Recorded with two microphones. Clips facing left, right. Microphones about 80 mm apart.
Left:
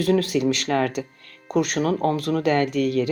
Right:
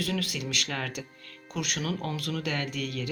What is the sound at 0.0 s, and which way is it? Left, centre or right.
Speech, left.